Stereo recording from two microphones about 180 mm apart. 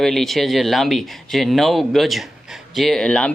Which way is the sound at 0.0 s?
Centre (ahead or behind).